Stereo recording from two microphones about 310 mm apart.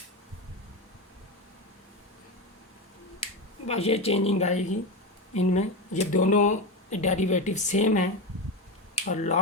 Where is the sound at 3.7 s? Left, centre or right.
Centre.